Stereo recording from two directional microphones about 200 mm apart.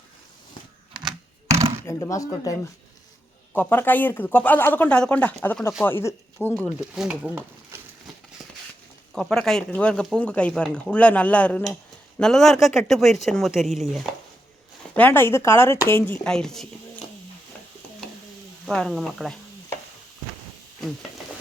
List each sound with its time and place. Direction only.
1.5 s a sound: 30° right (ahead or behind)
1.9 s speech: 15° left (ahead or behind)
6.7 s speech: 5° right (ahead or behind)
9.1 s speech: 5° left (ahead or behind)
18.6 s speech: centre (ahead or behind)